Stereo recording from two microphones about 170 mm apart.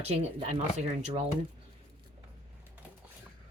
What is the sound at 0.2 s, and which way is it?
Speech, 40° right (ahead or behind).